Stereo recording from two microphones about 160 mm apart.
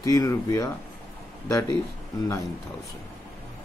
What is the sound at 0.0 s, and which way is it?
Speech, 20° left (ahead or behind).